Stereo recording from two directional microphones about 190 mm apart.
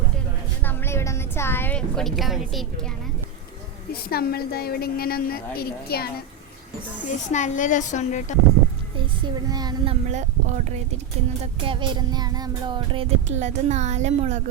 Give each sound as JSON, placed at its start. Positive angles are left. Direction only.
{"t": 0.6, "sound": "a sound", "side_deg": 10}
{"t": 4.1, "sound": "a woman's voice", "side_deg": 55}
{"t": 7.1, "sound": "a woman's voice", "side_deg": 40}
{"t": 9.0, "sound": "speech", "side_deg": -25}
{"t": 11.6, "sound": "child singing", "side_deg": -25}